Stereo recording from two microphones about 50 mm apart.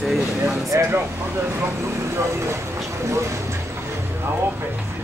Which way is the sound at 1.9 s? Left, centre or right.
Right.